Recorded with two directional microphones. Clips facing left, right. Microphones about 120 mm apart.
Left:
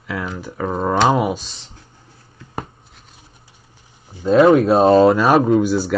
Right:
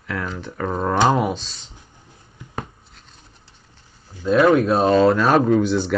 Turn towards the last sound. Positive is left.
turn(degrees=5)  # may be behind; listen again after turning